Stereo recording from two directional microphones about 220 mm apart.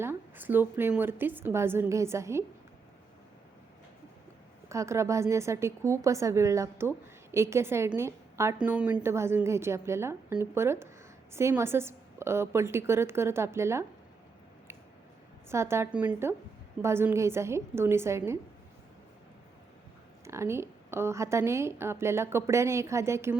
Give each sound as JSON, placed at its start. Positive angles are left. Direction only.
{"t": 0.0, "sound": "a woman's voice", "side_deg": -10}
{"t": 4.7, "sound": "a woman's voice", "side_deg": -15}
{"t": 15.4, "sound": "a woman's voice", "side_deg": -10}
{"t": 20.2, "sound": "a woman's voice", "side_deg": -10}